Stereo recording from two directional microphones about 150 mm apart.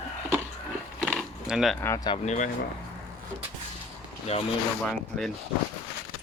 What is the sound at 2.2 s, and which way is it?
Speech, 50° left (ahead or behind).